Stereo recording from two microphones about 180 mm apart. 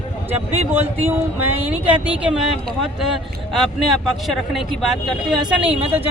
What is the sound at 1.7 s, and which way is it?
A man's voice, 10° right (ahead or behind).